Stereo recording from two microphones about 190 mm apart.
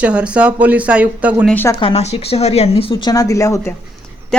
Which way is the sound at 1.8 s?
30° left (ahead or behind).